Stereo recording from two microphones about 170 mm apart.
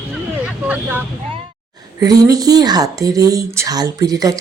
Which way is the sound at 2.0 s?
20° right (ahead or behind).